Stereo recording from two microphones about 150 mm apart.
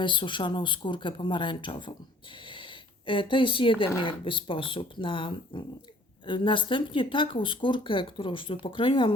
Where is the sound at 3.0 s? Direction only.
35° left (ahead or behind).